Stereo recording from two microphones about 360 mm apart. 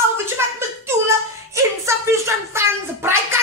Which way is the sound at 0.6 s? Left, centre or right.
Centre.